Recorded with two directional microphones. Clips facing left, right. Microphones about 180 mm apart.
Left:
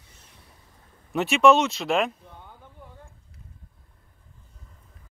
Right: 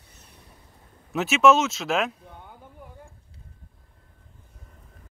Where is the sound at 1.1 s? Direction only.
Centre (ahead or behind).